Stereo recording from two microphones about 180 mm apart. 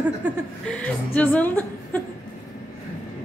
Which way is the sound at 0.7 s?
5° left (ahead or behind).